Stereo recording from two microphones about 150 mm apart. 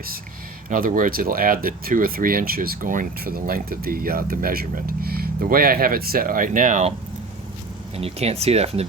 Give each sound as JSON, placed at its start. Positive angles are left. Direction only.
{"t": 0.7, "sound": "speech", "side_deg": -65}
{"t": 7.9, "sound": "speech", "side_deg": -40}